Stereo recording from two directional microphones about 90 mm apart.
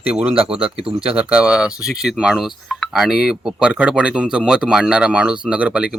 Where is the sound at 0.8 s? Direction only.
90° right.